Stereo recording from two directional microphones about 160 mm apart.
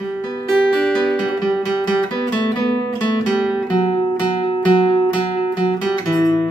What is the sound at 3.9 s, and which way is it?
Music, 30° left (ahead or behind).